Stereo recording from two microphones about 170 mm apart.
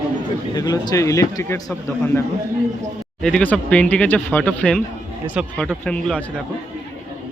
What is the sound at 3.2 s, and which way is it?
Speech, 5° left (ahead or behind).